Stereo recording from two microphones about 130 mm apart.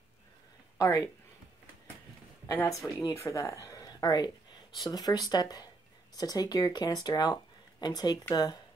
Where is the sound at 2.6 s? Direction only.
30° left (ahead or behind).